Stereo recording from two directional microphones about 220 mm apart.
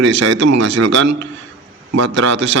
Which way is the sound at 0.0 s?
60° right (ahead or behind).